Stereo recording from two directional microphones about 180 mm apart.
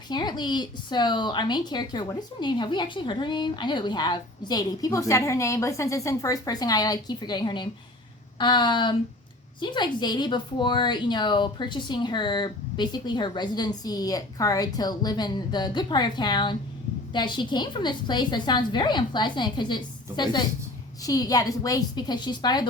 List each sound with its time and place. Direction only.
0.1 s a woman's voice: 25° left (ahead or behind)